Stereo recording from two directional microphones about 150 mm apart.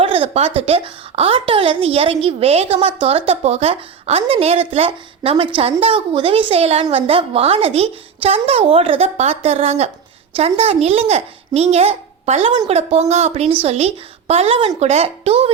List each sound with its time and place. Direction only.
0.0 s a woman's voice: 40° right (ahead or behind)